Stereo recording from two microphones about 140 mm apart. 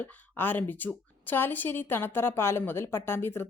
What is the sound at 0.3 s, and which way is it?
Speech, 15° left (ahead or behind).